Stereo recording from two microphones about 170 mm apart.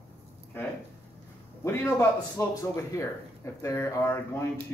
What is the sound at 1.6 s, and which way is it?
Speech, 15° left (ahead or behind).